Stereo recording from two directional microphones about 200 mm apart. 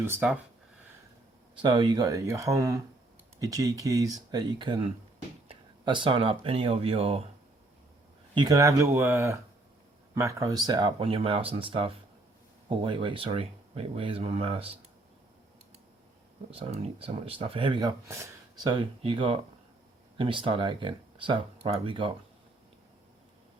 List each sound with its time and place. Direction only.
0.0 s speech: 10° right (ahead or behind)
1.6 s speech: 25° right (ahead or behind)
8.4 s speech: 20° right (ahead or behind)
16.5 s speech: 30° right (ahead or behind)